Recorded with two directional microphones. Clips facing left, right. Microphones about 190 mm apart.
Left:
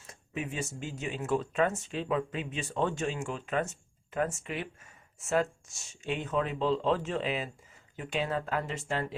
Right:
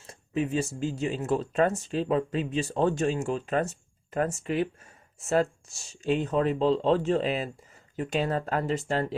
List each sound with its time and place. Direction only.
0.1 s speech: 35° right (ahead or behind)